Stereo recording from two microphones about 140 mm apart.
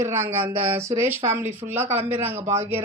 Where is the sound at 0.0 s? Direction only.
15° right (ahead or behind).